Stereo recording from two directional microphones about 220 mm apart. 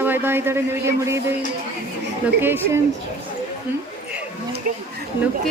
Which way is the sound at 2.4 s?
10° right (ahead or behind).